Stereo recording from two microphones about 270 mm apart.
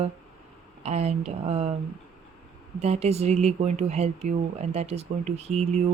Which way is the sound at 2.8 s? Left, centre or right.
Right.